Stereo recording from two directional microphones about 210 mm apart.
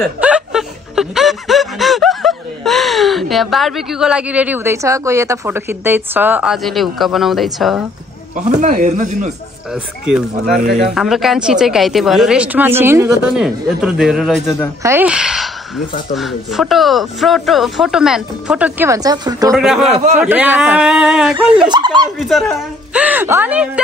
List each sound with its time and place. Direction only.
0.0 s speech: 5° right (ahead or behind)
8.4 s speech: 35° right (ahead or behind)
11.0 s a woman's voice: centre (ahead or behind); by 19.5 s 15° right (ahead or behind)
19.5 s a woman's voice: 5° right (ahead or behind)
21.6 s speech: 20° right (ahead or behind)
22.9 s speech: 10° right (ahead or behind)